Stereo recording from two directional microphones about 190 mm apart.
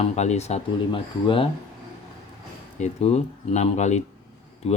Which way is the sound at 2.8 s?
35° left (ahead or behind).